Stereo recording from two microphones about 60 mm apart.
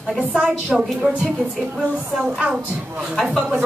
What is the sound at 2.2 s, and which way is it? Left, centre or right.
Speech, centre.